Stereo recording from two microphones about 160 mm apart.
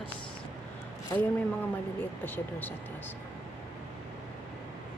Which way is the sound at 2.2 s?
10° left (ahead or behind).